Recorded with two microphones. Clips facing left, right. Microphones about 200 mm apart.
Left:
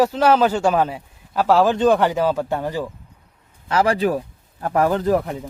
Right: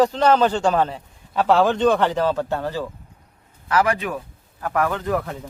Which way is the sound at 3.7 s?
30° left (ahead or behind).